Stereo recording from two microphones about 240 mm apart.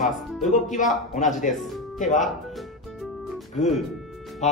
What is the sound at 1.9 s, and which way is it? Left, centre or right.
Speech, left.